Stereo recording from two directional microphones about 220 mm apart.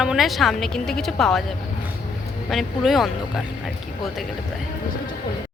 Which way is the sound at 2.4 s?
Centre (ahead or behind).